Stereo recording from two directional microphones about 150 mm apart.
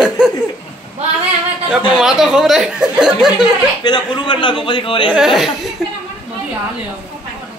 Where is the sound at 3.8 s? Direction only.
30° left (ahead or behind).